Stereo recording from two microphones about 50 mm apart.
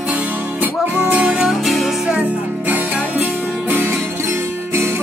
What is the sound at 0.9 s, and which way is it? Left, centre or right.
Music, right.